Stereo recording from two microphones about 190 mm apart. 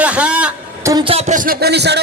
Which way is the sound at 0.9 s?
25° right (ahead or behind).